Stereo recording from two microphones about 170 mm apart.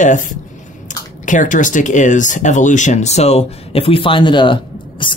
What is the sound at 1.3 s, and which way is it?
Speech, 50° left (ahead or behind).